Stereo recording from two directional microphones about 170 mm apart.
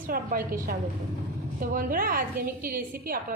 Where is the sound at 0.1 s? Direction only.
55° right (ahead or behind).